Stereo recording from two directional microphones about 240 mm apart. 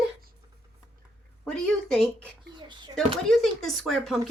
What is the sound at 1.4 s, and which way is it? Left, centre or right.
Speech, centre.